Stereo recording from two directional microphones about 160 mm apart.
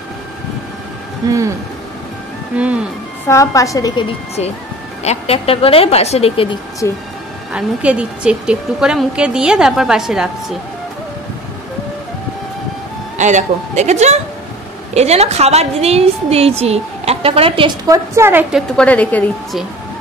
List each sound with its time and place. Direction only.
2.5 s a woman's voice: 5° right (ahead or behind)
3.3 s a woman's voice: 20° left (ahead or behind)
5.0 s speech: 40° left (ahead or behind)
6.8 s a woman's voice: 20° left (ahead or behind)
7.5 s speech: 5° right (ahead or behind)
13.2 s a woman's voice: 50° right (ahead or behind)
17.8 s a woman's voice: 20° right (ahead or behind)
18.5 s a woman's voice: 5° left (ahead or behind)